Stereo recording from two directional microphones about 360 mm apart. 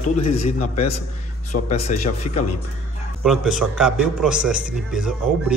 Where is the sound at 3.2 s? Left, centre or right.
Centre.